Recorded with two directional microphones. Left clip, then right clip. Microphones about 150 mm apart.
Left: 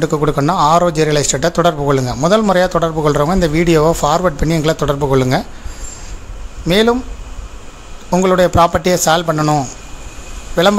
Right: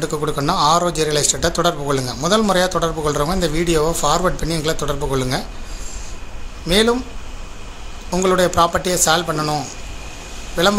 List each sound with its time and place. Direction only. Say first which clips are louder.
0.0 s a man's voice: left 6 dB; 55° left (ahead or behind)
6.6 s a man's voice: left 3 dB; 65° left (ahead or behind)
8.1 s a man's voice: left 4 dB; 65° left (ahead or behind)